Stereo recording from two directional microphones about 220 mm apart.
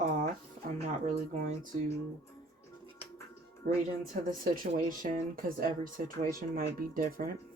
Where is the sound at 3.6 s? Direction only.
40° right (ahead or behind).